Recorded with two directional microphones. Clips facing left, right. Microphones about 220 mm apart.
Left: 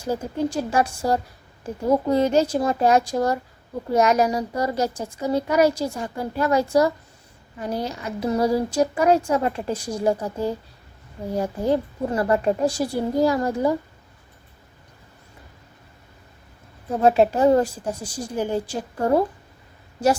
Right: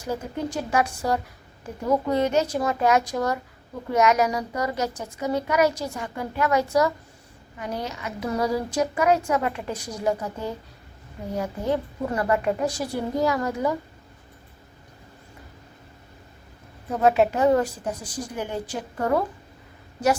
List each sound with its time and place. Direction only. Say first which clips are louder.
0.0 s a woman's voice: left 4 dB; 30° left (ahead or behind)
17.0 s a woman's voice: left 2 dB; 30° left (ahead or behind)